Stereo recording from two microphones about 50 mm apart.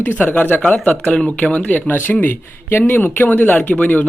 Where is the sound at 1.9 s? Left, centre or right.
Left.